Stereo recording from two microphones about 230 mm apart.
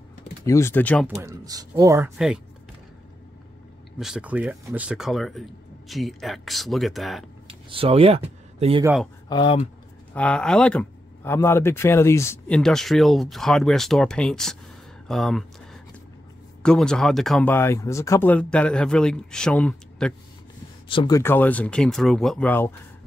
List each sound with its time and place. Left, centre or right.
0.5 s speech: centre
1.0 s speech: centre
2.1 s speech: centre
4.0 s speech: centre
7.4 s speech: right
9.3 s speech: left
10.1 s speech: centre
20.9 s speech: left
21.2 s speech: centre